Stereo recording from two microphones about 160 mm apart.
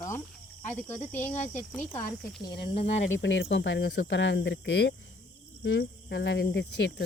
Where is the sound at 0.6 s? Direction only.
10° left (ahead or behind).